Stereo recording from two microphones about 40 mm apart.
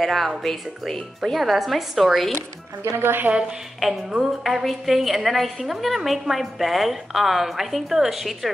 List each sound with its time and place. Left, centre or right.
0.0 s a woman's voice: centre
3.0 s speech: right
3.3 s a woman's voice: right
4.4 s a woman's voice: centre